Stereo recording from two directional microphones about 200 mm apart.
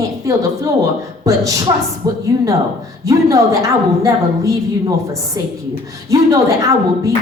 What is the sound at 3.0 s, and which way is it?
A woman's voice, 15° right (ahead or behind).